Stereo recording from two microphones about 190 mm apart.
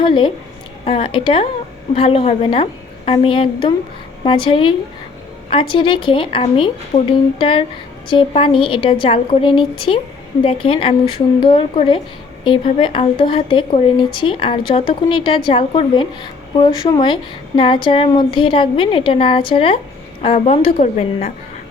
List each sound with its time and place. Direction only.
0.0 s a woman's voice: 25° left (ahead or behind)